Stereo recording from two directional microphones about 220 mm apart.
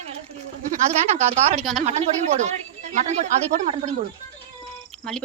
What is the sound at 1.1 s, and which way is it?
A woman's voice, 30° right (ahead or behind).